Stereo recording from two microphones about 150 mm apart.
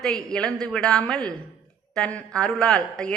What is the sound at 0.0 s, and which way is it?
A woman's voice, 5° left (ahead or behind).